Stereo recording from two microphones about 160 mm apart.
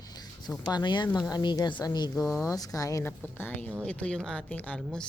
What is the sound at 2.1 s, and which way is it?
Speech, centre (ahead or behind).